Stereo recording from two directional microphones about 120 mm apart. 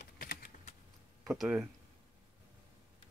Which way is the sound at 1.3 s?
5° right (ahead or behind).